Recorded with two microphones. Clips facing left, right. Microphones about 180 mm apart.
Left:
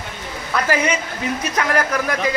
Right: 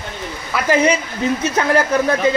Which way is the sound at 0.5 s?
5° right (ahead or behind).